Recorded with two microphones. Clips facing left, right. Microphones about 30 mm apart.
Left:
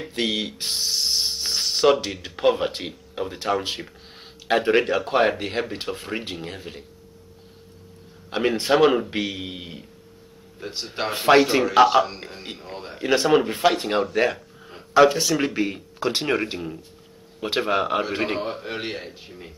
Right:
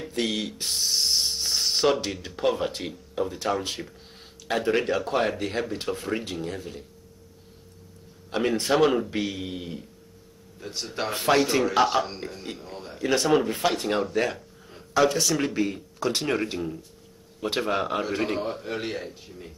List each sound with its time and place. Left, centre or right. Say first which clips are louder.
0.0 s speech: left 3 dB; left
0.9 s insect: right 1 dB; centre
1.4 s a sound: left 1 dB; centre
1.7 s speech: left 5 dB; centre
2.3 s speech: left 5 dB; left
8.3 s speech: left 3 dB; left
11.6 s speech: left 6 dB; centre
12.3 s a man's voice: left 1 dB; left